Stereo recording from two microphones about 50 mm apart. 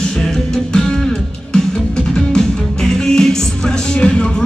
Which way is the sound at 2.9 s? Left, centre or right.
Centre.